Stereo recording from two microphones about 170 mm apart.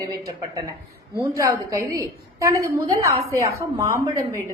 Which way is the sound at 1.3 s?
20° right (ahead or behind).